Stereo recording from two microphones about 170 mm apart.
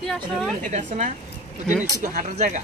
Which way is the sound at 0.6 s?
50° right (ahead or behind).